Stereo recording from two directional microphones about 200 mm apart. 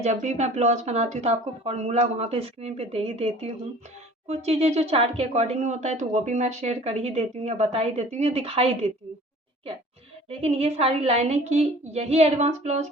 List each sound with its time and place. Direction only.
0.0 s speech: 35° right (ahead or behind)
10.2 s speech: 30° right (ahead or behind)